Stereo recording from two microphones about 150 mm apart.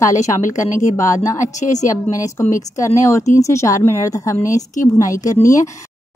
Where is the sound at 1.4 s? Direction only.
55° left (ahead or behind).